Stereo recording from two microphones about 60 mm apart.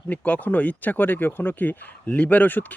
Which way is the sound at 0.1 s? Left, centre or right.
Left.